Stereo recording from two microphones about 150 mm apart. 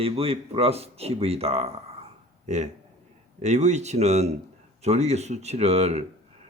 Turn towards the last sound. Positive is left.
turn(degrees=-45)  # may be behind; listen again after turning